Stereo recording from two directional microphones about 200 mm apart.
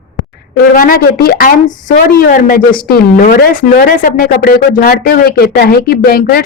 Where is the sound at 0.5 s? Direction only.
45° left (ahead or behind).